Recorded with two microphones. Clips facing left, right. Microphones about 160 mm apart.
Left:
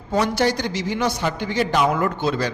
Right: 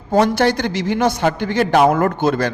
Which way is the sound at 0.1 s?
55° right (ahead or behind).